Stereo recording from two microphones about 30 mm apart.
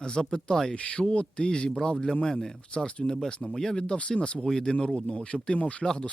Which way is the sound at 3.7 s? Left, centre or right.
Left.